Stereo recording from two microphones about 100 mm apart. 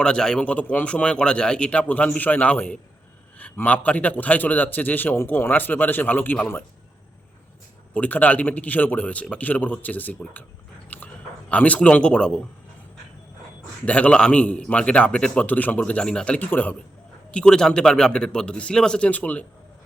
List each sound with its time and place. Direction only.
0.0 s a man's voice: 5° left (ahead or behind)
7.9 s a man's voice: 15° left (ahead or behind)
10.8 s a sound: 15° left (ahead or behind)
13.8 s a man's voice: 10° left (ahead or behind)